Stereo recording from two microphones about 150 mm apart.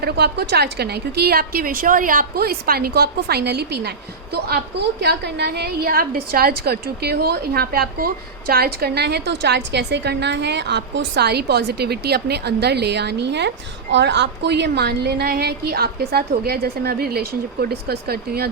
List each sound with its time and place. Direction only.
0.0 s a woman's voice: 90° right
14.8 s a woman's voice: 90° right